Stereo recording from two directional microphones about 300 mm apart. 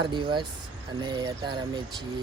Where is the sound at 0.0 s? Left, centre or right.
Centre.